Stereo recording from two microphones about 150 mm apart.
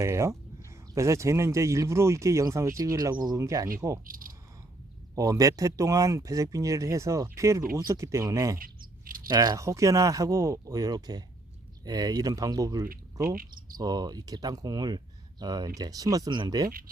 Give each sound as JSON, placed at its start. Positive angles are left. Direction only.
{"t": 0.0, "sound": "speech", "side_deg": -20}
{"t": 4.0, "sound": "speech", "side_deg": -70}
{"t": 5.1, "sound": "speech", "side_deg": -25}
{"t": 8.5, "sound": "a sound", "side_deg": -70}
{"t": 9.3, "sound": "speech", "side_deg": -25}
{"t": 13.2, "sound": "cricket", "side_deg": -70}
{"t": 13.7, "sound": "speech", "side_deg": -25}